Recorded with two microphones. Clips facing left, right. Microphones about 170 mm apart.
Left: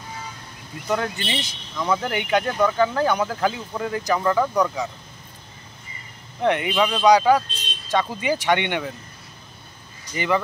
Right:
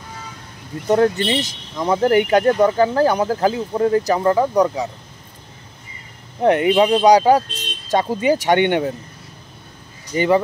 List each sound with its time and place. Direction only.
0.8 s speech: 35° right (ahead or behind)
6.4 s speech: 40° right (ahead or behind)
10.1 s speech: 35° right (ahead or behind)